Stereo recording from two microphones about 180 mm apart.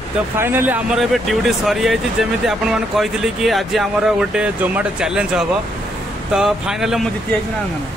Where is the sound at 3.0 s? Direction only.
Centre (ahead or behind).